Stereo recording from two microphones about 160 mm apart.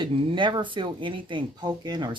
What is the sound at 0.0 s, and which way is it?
Speech, 30° right (ahead or behind).